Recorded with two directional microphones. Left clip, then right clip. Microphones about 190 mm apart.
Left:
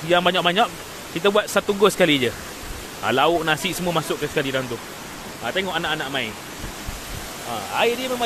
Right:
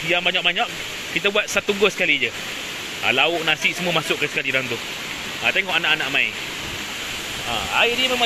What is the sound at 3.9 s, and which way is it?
Speech, 10° left (ahead or behind).